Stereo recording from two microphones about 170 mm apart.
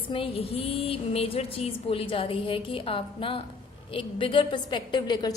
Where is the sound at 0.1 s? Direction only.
35° left (ahead or behind).